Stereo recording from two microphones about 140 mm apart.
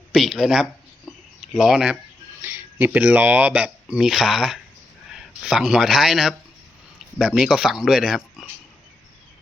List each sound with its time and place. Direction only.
0.1 s speech: centre (ahead or behind)